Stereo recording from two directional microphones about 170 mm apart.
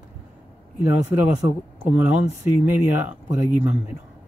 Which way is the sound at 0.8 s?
20° right (ahead or behind).